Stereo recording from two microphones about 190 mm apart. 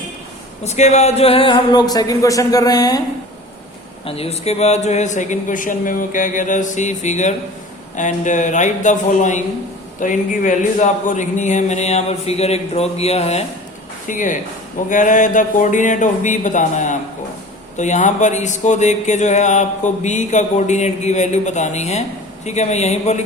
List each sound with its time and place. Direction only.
0.6 s speech: 35° left (ahead or behind); by 3.0 s 20° left (ahead or behind)
4.0 s speech: 30° left (ahead or behind)